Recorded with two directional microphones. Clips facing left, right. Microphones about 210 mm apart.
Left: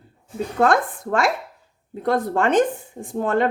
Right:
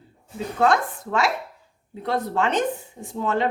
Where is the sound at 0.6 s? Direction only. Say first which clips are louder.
Left 1 dB; 50° left (ahead or behind).